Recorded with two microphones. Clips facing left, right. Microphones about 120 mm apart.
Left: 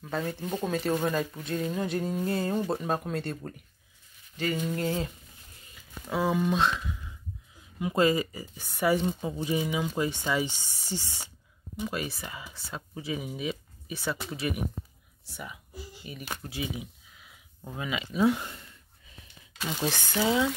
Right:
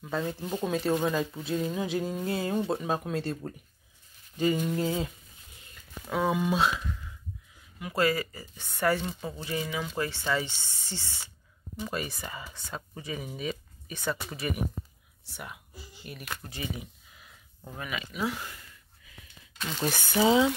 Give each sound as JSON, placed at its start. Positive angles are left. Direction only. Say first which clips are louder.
{"t": 0.3, "sound": "speech", "louder": "even", "side_deg": 0}
{"t": 4.4, "sound": "a sound", "louder": "right 3 dB", "side_deg": -10}
{"t": 5.8, "sound": "speech", "louder": "even", "side_deg": 0}
{"t": 7.8, "sound": "speech", "louder": "left 3 dB", "side_deg": 20}
{"t": 11.8, "sound": "speech", "louder": "left 1 dB", "side_deg": 0}
{"t": 16.0, "sound": "speech", "louder": "right 1 dB", "side_deg": 0}
{"t": 16.4, "sound": "a sound", "louder": "left 4 dB", "side_deg": 5}
{"t": 17.7, "sound": "speech", "louder": "left 6 dB", "side_deg": 20}
{"t": 19.6, "sound": "speech", "louder": "left 1 dB", "side_deg": 5}
{"t": 19.9, "sound": "a sound", "louder": "right 5 dB", "side_deg": -15}